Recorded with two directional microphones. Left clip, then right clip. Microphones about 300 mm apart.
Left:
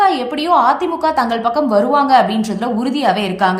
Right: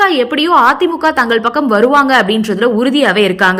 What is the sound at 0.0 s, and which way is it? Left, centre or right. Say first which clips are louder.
A woman's voice: right 3 dB; centre.